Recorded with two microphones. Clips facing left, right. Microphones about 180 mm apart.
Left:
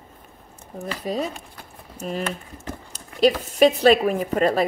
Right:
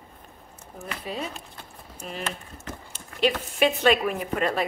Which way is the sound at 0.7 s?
35° left (ahead or behind).